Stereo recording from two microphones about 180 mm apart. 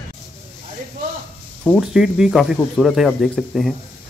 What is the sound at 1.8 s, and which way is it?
Speech, 5° right (ahead or behind).